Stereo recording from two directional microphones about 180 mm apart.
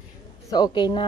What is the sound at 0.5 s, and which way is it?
Speech, 25° left (ahead or behind).